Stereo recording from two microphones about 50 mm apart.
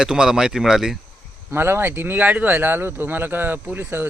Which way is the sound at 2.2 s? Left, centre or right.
Right.